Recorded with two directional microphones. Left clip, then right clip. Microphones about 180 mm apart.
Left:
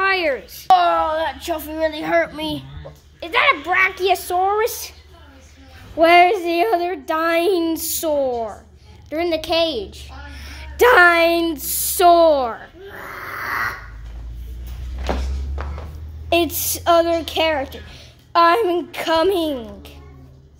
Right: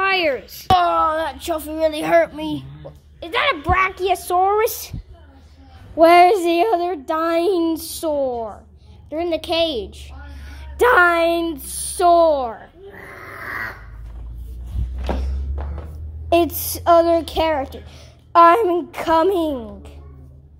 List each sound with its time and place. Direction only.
0.0 s a sound: 10° right (ahead or behind)
2.0 s a child's voice: 30° right (ahead or behind)
2.3 s speech: 5° right (ahead or behind)
3.2 s a child's voice: 20° right (ahead or behind)
4.3 s a woman's voice: 25° right (ahead or behind)
5.9 s a woman's voice: 20° right (ahead or behind)
6.5 s speech: 15° right (ahead or behind)
10.4 s speech: centre (ahead or behind)
16.3 s speech: 15° right (ahead or behind)